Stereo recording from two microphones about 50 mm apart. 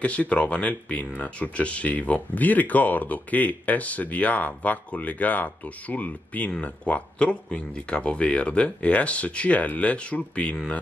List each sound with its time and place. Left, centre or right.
0.0 s speech: left